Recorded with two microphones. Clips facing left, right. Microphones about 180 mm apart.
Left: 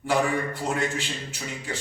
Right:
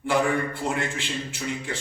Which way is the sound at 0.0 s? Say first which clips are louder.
Right 1 dB; 45° left (ahead or behind).